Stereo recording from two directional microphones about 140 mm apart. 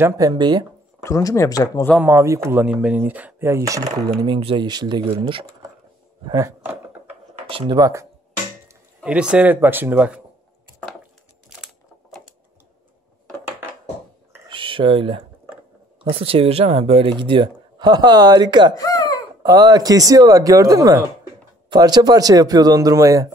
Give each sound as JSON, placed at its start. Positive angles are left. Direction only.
{"t": 0.0, "sound": "speech", "side_deg": -30}
{"t": 1.0, "sound": "speech", "side_deg": 20}
{"t": 2.0, "sound": "speech", "side_deg": -15}
{"t": 4.4, "sound": "speech", "side_deg": -35}
{"t": 6.2, "sound": "speech", "side_deg": -25}
{"t": 7.4, "sound": "speech", "side_deg": -35}
{"t": 9.0, "sound": "speech", "side_deg": -5}
{"t": 14.5, "sound": "a sound", "side_deg": -35}
{"t": 16.0, "sound": "speech", "side_deg": -40}
{"t": 18.8, "sound": "a sound", "side_deg": 25}
{"t": 19.4, "sound": "speech", "side_deg": -30}